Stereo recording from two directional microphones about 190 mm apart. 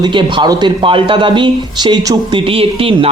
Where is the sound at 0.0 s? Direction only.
25° right (ahead or behind).